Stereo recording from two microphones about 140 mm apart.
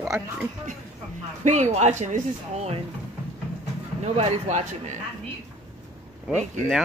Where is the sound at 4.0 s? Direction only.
50° right (ahead or behind).